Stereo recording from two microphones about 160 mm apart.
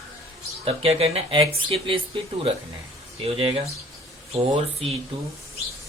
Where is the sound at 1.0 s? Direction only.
40° right (ahead or behind).